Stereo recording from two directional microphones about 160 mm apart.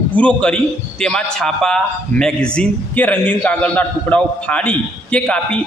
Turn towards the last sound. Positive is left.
turn(degrees=10)  # may be behind; listen again after turning